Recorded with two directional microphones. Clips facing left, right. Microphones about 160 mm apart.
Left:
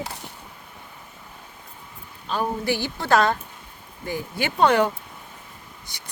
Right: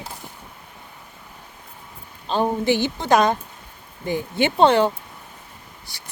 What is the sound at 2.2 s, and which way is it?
A woman's voice, 25° right (ahead or behind).